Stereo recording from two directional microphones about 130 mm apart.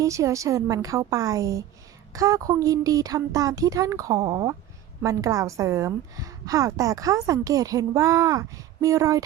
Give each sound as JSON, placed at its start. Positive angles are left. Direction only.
{"t": 0.0, "sound": "a woman's voice", "side_deg": -25}